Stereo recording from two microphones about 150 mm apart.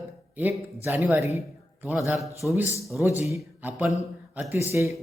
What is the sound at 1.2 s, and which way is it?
Speech, 45° left (ahead or behind).